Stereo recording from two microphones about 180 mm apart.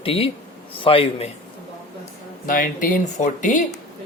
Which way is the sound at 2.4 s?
50° left (ahead or behind).